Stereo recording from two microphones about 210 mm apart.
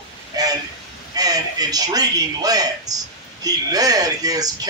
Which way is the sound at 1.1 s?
20° right (ahead or behind).